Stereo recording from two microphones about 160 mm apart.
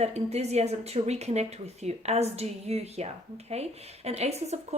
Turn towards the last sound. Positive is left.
turn(degrees=-45)  # may be behind; listen again after turning